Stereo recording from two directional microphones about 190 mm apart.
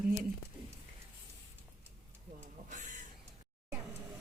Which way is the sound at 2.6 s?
40° right (ahead or behind).